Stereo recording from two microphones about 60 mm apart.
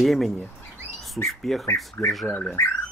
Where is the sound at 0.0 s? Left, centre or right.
Centre.